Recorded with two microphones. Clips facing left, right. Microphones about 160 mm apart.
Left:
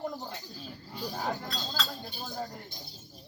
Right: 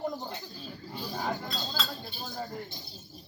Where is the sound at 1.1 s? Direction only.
10° left (ahead or behind).